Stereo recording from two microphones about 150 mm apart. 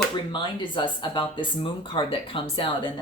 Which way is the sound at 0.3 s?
30° left (ahead or behind).